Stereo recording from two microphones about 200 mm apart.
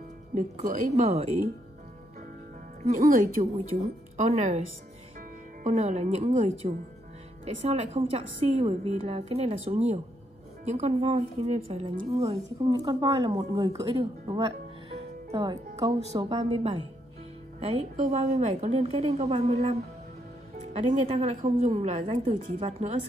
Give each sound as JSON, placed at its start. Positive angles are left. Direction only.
{"t": 0.3, "sound": "a woman's voice", "side_deg": -40}
{"t": 3.4, "sound": "a woman's voice", "side_deg": -40}